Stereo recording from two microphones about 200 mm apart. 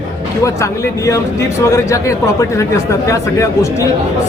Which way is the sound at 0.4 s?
15° left (ahead or behind).